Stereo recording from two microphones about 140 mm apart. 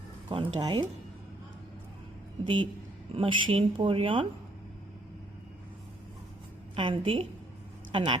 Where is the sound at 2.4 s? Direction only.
35° right (ahead or behind).